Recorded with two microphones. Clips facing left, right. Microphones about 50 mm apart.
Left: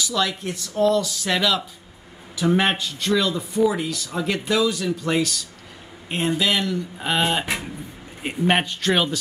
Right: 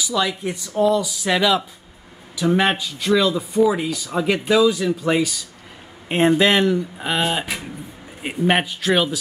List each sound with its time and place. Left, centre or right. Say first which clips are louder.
0.0 s speech: right 2 dB; centre
2.3 s speech: right 2 dB; centre
6.0 s speech: right 6 dB; right
7.0 s a man's voice: even; centre